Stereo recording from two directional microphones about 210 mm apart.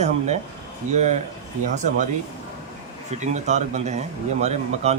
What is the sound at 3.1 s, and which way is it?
A man's voice, 35° right (ahead or behind).